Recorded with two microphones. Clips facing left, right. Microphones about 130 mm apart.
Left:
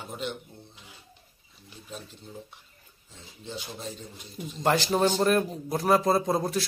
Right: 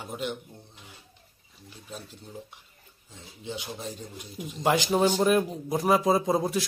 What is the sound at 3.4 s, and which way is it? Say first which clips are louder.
A man's voice: right 2 dB; 15° right (ahead or behind).